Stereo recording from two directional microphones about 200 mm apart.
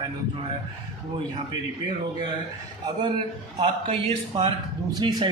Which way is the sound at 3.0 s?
25° right (ahead or behind).